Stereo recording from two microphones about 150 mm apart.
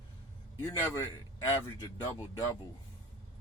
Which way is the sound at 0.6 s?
15° left (ahead or behind).